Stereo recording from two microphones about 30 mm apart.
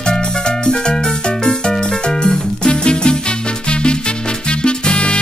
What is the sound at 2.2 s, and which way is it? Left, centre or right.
Music, left.